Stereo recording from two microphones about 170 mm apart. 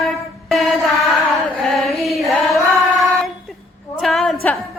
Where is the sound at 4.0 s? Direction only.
Centre (ahead or behind).